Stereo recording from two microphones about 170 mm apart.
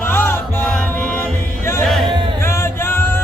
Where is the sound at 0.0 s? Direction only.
15° left (ahead or behind).